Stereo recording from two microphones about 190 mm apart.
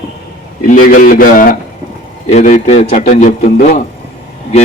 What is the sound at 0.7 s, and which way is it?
Speech, 45° left (ahead or behind).